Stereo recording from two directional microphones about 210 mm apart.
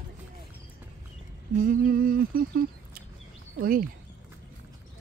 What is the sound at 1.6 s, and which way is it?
Speech, 40° right (ahead or behind).